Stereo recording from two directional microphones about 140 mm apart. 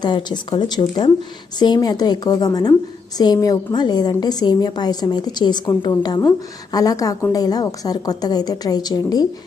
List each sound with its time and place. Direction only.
0.0 s a woman's voice: 30° left (ahead or behind)